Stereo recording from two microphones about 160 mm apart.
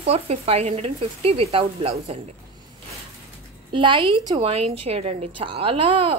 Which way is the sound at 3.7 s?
30° right (ahead or behind).